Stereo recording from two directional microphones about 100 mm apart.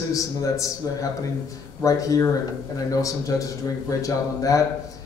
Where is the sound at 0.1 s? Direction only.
35° left (ahead or behind).